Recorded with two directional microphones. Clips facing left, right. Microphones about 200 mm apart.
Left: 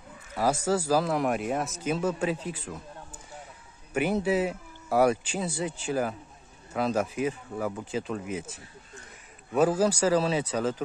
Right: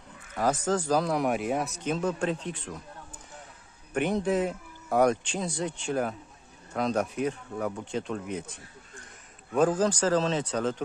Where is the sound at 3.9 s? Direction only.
5° left (ahead or behind).